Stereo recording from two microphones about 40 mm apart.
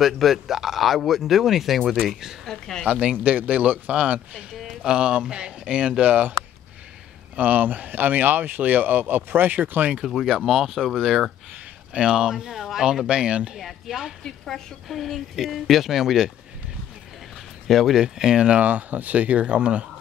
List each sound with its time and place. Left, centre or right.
0.0 s speech: centre
2.4 s a sound: centre
2.9 s speech: right
4.8 s speech: right
7.3 s speech: right
10.1 s speech: centre
11.9 s speech: right
13.6 s speech: centre
14.2 s a woman's voice: centre
14.9 s speech: centre
17.6 s speech: centre
17.9 s speech: centre
18.5 s speech: right